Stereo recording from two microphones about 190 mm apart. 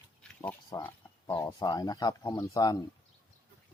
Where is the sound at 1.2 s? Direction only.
20° left (ahead or behind).